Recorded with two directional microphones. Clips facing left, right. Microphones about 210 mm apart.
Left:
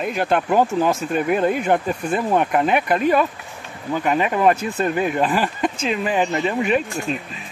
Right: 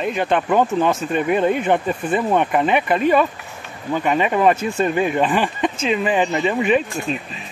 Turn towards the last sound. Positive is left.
turn(degrees=0)  # may be behind; listen again after turning